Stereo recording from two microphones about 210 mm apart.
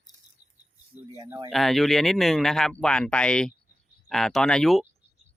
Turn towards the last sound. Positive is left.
turn(degrees=0)  # may be behind; listen again after turning